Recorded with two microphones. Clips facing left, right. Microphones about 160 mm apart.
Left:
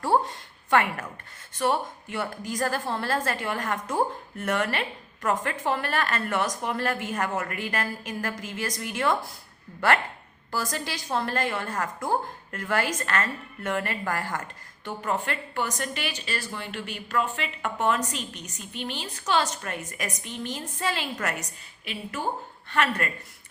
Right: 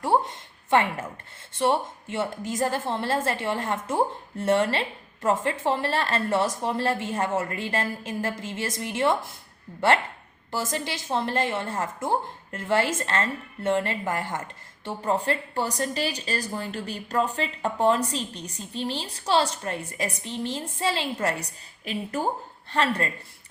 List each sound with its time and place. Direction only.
0.0 s a woman's voice: 20° right (ahead or behind)
10.5 s a woman's voice: 25° right (ahead or behind); by 22.3 s 40° right (ahead or behind)
22.7 s a woman's voice: 30° right (ahead or behind)